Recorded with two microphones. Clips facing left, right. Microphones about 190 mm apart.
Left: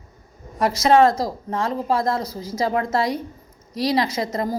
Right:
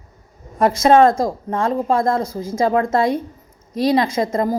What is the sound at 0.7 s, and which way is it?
A woman's voice, 50° right (ahead or behind).